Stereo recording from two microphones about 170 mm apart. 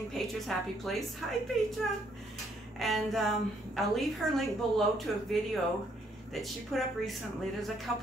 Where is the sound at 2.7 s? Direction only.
Centre (ahead or behind).